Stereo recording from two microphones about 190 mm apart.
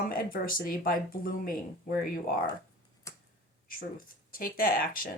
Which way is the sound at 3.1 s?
15° left (ahead or behind).